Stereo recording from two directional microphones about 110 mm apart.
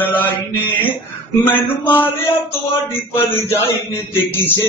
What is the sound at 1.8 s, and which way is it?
Mantra, 15° left (ahead or behind).